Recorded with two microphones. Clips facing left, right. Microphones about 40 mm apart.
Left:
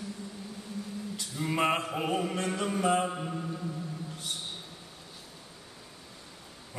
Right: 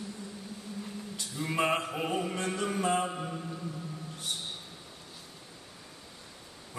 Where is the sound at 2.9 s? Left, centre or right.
Centre.